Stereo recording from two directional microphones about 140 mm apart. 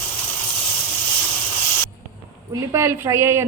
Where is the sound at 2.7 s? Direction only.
20° right (ahead or behind).